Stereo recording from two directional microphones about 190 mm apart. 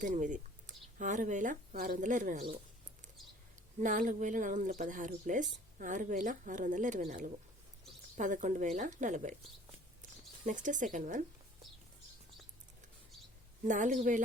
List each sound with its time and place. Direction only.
0.0 s speech: 40° right (ahead or behind)
3.8 s speech: 40° right (ahead or behind)
13.7 s speech: 40° right (ahead or behind)